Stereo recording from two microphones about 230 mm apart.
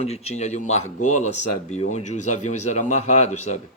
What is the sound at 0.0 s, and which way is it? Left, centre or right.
Speech, left.